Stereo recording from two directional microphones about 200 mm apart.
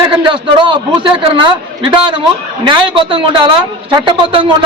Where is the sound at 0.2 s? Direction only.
25° right (ahead or behind).